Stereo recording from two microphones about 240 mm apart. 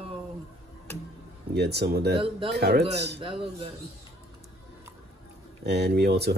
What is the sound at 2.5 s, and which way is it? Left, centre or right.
Speech, right.